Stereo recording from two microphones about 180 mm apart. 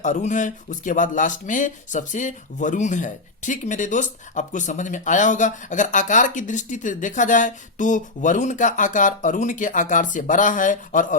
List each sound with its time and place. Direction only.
0.0 s speech: 45° left (ahead or behind)